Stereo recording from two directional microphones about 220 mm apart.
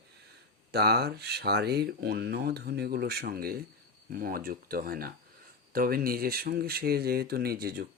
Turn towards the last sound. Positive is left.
turn(degrees=-45)  # may be behind; listen again after turning